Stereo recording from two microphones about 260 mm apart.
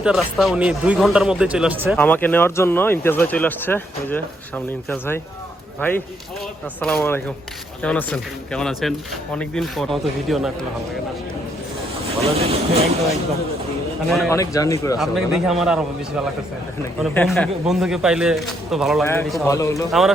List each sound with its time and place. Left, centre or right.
0.0 s speech: centre
12.2 s speech: right
14.1 s speech: centre
14.3 s speech: centre
14.9 s speech: centre
17.0 s speech: centre
19.9 s speech: centre